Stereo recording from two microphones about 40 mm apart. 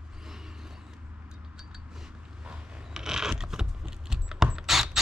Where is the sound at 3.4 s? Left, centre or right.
Centre.